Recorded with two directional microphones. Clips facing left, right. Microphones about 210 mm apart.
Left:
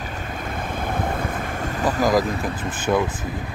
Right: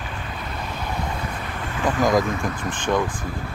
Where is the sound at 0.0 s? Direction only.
45° left (ahead or behind).